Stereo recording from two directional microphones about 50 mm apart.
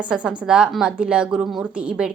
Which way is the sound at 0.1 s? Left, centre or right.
Centre.